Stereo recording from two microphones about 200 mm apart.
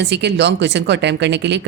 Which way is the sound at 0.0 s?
60° right (ahead or behind).